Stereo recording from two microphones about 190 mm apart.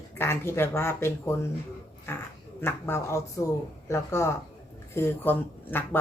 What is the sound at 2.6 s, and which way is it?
Speech, 10° left (ahead or behind).